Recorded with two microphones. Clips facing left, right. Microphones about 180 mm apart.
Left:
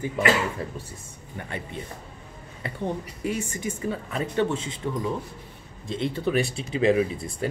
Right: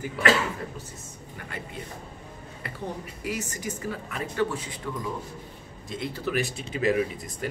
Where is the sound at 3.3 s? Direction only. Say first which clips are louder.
Left 3 dB; 30° left (ahead or behind).